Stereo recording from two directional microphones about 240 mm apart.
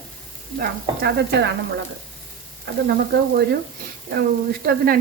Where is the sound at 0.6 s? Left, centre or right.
Right.